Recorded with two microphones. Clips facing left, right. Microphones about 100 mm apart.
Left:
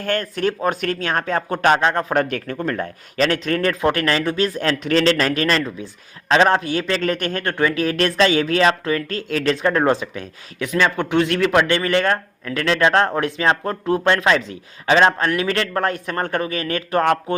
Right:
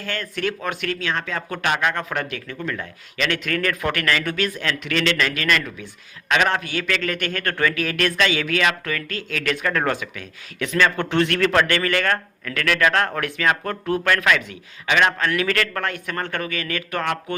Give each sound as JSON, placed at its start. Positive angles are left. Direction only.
{"t": 0.0, "sound": "speech", "side_deg": 45}
{"t": 7.4, "sound": "speech", "side_deg": 20}
{"t": 10.6, "sound": "speech", "side_deg": 15}